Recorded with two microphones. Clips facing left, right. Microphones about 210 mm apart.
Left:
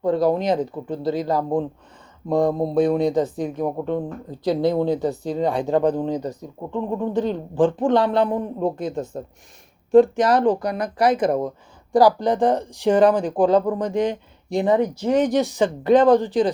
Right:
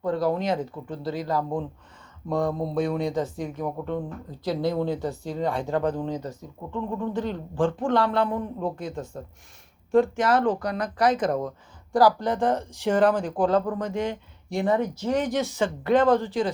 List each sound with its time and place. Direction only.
0.0 s a woman's voice: 20° left (ahead or behind)
3.6 s a woman's voice: 30° left (ahead or behind)